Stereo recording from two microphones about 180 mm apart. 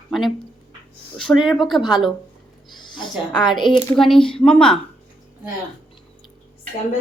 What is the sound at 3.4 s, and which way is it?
Speech, 25° left (ahead or behind).